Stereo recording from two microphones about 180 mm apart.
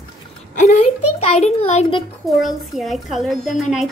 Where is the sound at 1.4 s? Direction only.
40° left (ahead or behind).